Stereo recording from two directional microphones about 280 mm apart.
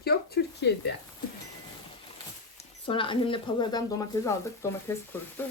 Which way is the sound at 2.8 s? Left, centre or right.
Centre.